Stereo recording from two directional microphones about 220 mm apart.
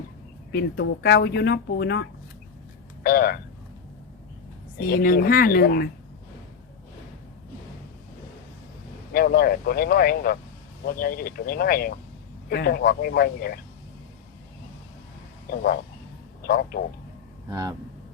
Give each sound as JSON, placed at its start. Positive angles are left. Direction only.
{"t": 0.5, "sound": "speech", "side_deg": 55}
{"t": 4.8, "sound": "speech", "side_deg": 40}
{"t": 9.1, "sound": "speech", "side_deg": 40}
{"t": 15.4, "sound": "speech", "side_deg": 45}
{"t": 17.5, "sound": "speech", "side_deg": -15}